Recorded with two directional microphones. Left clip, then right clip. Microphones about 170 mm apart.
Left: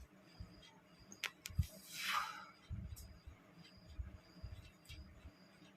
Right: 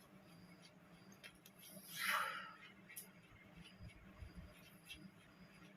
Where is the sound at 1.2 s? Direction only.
45° left (ahead or behind).